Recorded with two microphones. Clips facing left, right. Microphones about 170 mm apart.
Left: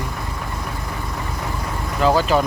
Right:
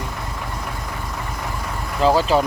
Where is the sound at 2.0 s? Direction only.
30° right (ahead or behind).